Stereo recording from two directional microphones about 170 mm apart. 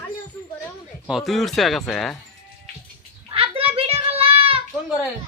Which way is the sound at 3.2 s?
30° right (ahead or behind).